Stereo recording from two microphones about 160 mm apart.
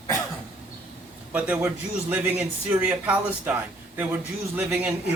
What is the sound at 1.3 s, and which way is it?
A man's voice, 10° right (ahead or behind).